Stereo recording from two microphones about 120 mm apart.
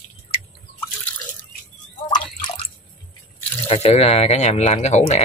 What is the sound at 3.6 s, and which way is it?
Speech, 55° left (ahead or behind).